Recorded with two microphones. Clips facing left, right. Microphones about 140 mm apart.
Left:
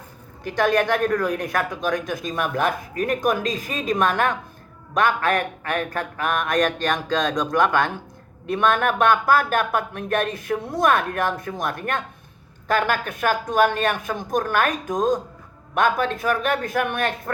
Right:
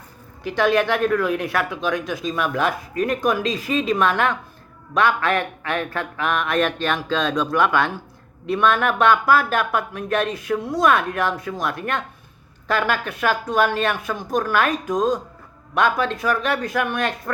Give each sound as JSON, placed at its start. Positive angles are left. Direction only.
{"t": 0.4, "sound": "speech", "side_deg": 50}